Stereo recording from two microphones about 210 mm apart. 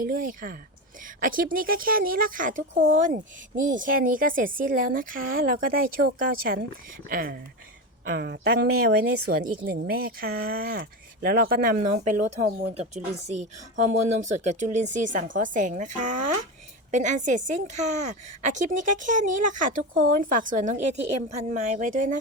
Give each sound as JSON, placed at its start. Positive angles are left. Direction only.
{"t": 0.0, "sound": "a woman's voice", "side_deg": -40}